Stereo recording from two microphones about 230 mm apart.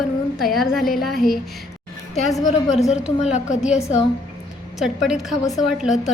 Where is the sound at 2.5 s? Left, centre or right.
Left.